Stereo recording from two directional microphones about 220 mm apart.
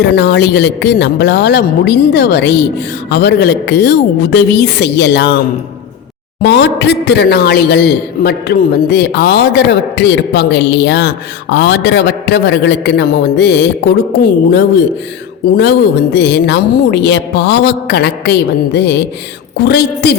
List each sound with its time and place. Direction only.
0.0 s a man's voice: 50° left (ahead or behind)
6.4 s a man's voice: 50° left (ahead or behind)
16.1 s a man's voice: 50° left (ahead or behind)